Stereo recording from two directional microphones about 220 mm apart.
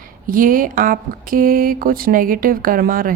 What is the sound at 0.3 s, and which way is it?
Speech, 40° right (ahead or behind).